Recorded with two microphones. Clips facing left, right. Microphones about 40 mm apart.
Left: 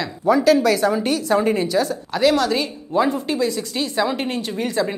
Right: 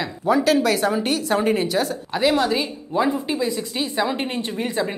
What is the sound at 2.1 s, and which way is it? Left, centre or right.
Speech, centre.